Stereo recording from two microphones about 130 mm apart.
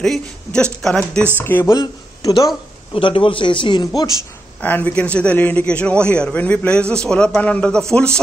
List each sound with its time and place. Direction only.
0.0 s a man's voice: 5° left (ahead or behind)
1.7 s speech: 30° left (ahead or behind)
2.9 s a man's voice: 40° left (ahead or behind)
4.6 s a man's voice: 15° left (ahead or behind)